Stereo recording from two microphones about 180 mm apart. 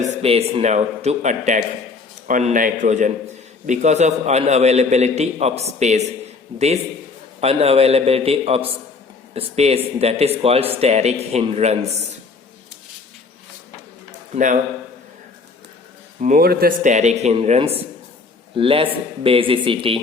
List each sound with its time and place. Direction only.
0.2 s a man's voice: 35° right (ahead or behind)
7.4 s speech: 35° right (ahead or behind)
14.3 s a man's voice: 45° right (ahead or behind)
16.2 s speech: 50° right (ahead or behind); by 20.0 s 30° right (ahead or behind)